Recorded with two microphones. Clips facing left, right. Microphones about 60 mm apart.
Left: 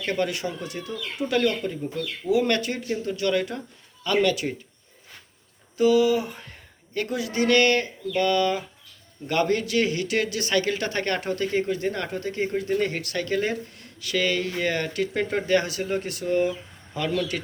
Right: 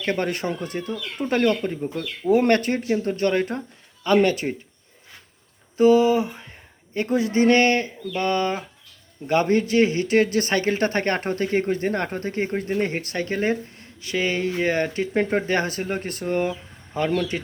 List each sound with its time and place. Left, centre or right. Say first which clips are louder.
0.0 s speech: right 2 dB; right
5.7 s speech: right 3 dB; right
6.4 s a sound: right 1 dB; centre
7.0 s speech: right 6 dB; right